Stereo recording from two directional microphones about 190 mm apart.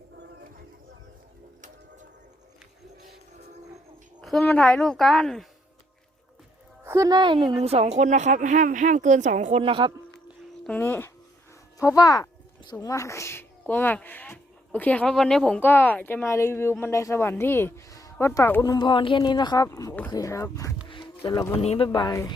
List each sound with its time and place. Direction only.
4.2 s a woman's voice: centre (ahead or behind)
6.8 s a woman's voice: 15° right (ahead or behind)
10.7 s a woman's voice: 10° left (ahead or behind)
20.8 s a sound: 25° left (ahead or behind)
21.5 s speech: 30° left (ahead or behind)
21.8 s speech: 20° left (ahead or behind)